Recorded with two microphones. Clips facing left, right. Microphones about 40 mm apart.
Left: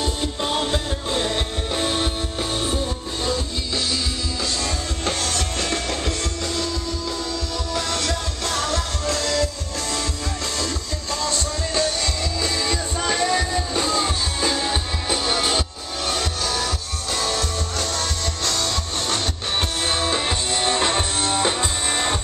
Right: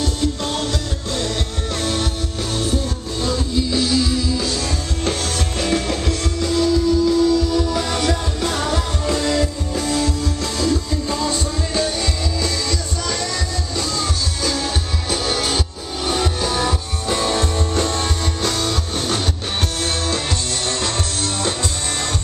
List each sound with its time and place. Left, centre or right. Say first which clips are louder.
0.0 s music: right 3 dB; centre
3.3 s music: right 6 dB; centre
5.6 s music: right 8 dB; centre
9.8 s music: right 6 dB; centre
12.6 s music: left 1 dB; left; by 15.6 s centre
16.1 s music: right 4 dB; centre
18.4 s music: right 2 dB; centre
19.8 s music: left 1 dB; centre